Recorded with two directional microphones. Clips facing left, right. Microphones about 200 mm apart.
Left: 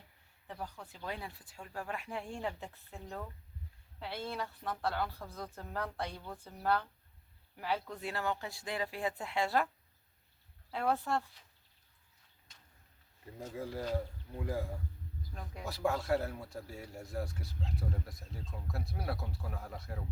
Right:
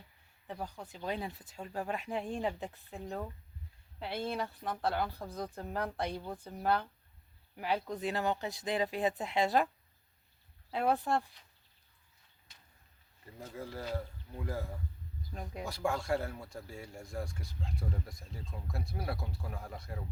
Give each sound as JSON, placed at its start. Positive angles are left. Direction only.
{"t": 0.4, "sound": "speech", "side_deg": -15}
{"t": 10.7, "sound": "speech", "side_deg": -15}
{"t": 13.4, "sound": "speech", "side_deg": 15}
{"t": 15.6, "sound": "speech", "side_deg": 0}